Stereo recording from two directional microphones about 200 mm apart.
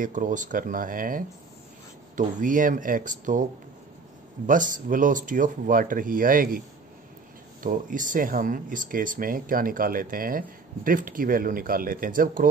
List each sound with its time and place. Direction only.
0.0 s speech: 40° right (ahead or behind)
4.5 s speech: 40° right (ahead or behind)
7.6 s speech: 40° right (ahead or behind)